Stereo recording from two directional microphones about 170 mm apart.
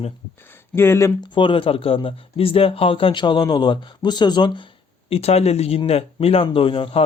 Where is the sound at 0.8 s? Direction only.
15° left (ahead or behind).